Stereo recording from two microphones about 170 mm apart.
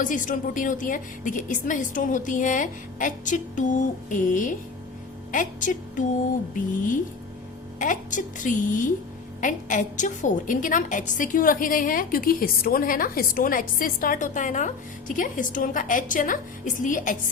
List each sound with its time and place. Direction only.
0.0 s a woman's voice: 50° left (ahead or behind)